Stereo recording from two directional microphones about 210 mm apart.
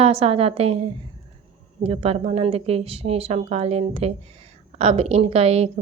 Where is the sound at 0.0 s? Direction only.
25° right (ahead or behind).